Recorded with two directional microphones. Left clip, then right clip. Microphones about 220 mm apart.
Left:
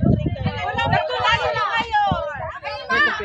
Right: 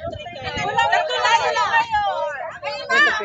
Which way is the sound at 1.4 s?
5° right (ahead or behind).